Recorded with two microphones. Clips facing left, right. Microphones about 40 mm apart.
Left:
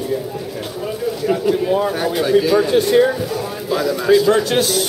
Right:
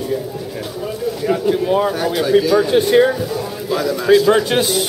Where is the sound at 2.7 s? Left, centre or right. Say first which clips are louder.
Right 2 dB; centre.